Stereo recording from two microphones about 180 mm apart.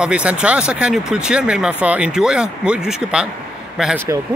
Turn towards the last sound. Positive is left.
turn(degrees=-5)  # may be behind; listen again after turning